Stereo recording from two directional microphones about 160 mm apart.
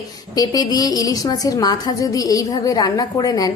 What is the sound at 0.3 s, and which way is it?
A woman's voice, 25° left (ahead or behind).